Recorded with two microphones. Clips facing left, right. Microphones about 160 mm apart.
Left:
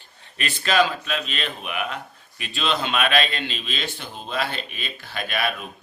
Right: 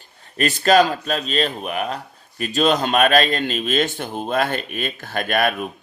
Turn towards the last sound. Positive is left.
turn(degrees=-50)  # may be behind; listen again after turning